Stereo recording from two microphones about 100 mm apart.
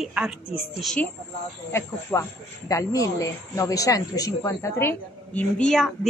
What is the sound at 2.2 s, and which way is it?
Speech, 35° left (ahead or behind).